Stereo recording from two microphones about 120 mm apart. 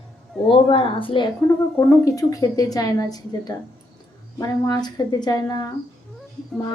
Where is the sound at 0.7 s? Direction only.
50° left (ahead or behind).